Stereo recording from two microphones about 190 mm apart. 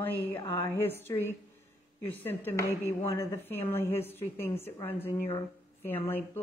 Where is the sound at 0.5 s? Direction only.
15° left (ahead or behind).